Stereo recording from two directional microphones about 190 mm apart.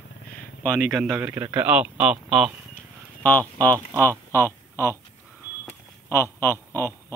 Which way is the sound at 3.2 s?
10° left (ahead or behind).